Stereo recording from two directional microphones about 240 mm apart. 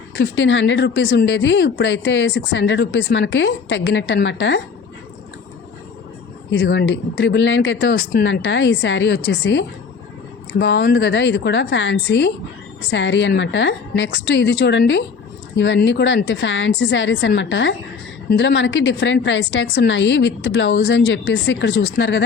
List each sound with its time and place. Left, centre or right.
0.2 s speech: left
6.5 s speech: left